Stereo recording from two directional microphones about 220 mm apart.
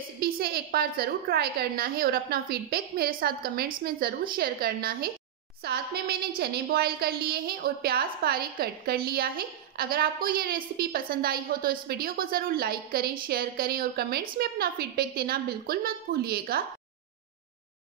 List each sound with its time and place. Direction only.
0.2 s a woman's voice: 45° right (ahead or behind)